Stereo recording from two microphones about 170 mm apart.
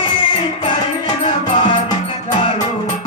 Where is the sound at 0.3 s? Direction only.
30° left (ahead or behind).